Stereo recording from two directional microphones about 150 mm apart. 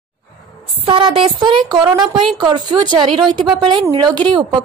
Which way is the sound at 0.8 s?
35° right (ahead or behind).